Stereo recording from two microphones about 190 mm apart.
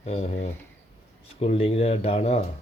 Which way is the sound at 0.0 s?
35° left (ahead or behind).